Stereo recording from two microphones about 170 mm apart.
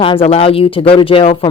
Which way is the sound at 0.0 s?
30° left (ahead or behind).